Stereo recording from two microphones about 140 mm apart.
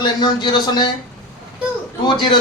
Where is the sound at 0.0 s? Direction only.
30° left (ahead or behind).